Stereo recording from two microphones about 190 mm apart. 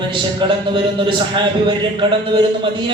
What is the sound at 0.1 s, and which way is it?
Speech, 25° right (ahead or behind).